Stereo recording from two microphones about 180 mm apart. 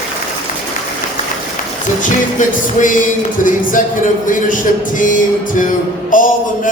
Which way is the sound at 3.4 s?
45° left (ahead or behind).